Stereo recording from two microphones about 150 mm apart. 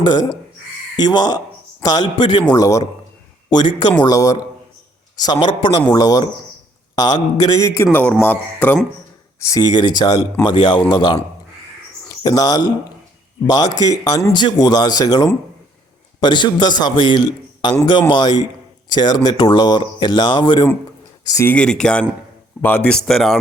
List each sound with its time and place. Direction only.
0.0 s speech: 30° left (ahead or behind)
7.9 s speech: 10° left (ahead or behind)
9.4 s a man's voice: 25° left (ahead or behind)
21.2 s speech: 20° left (ahead or behind)
21.5 s speech: 5° left (ahead or behind)